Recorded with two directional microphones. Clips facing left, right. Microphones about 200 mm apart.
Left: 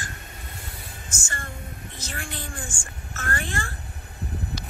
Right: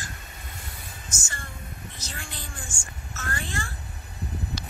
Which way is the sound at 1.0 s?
55° left (ahead or behind).